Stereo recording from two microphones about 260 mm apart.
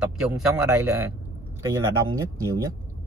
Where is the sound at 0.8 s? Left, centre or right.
Centre.